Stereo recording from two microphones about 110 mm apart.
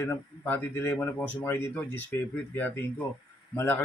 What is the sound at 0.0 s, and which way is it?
A man's voice, 15° left (ahead or behind).